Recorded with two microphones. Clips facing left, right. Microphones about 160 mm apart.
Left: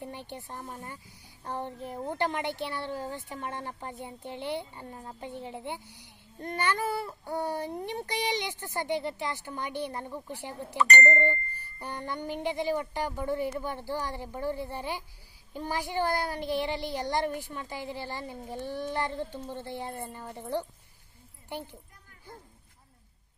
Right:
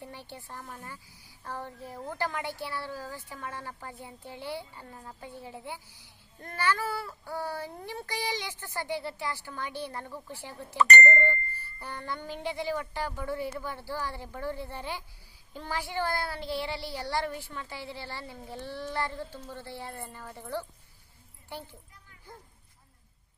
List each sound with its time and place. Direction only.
0.0 s a woman's voice: 20° left (ahead or behind)